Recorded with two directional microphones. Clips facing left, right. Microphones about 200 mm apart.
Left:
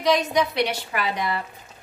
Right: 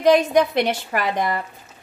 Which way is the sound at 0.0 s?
55° right (ahead or behind).